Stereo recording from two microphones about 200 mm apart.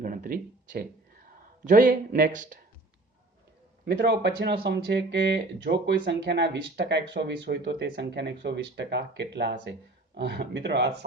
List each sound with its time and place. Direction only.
0.0 s a sound: 45° right (ahead or behind)
1.6 s speech: 40° right (ahead or behind)
3.9 s speech: 60° right (ahead or behind)